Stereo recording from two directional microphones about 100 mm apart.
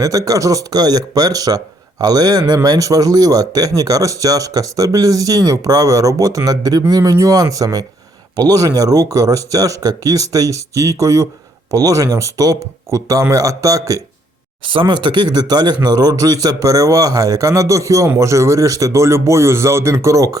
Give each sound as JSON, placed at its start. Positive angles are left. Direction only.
{"t": 0.0, "sound": "speech", "side_deg": -35}
{"t": 14.6, "sound": "a man's voice", "side_deg": -60}